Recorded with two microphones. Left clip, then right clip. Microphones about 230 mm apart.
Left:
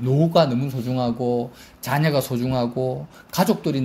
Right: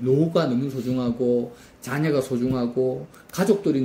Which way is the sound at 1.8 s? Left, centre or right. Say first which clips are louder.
Left 2 dB; left.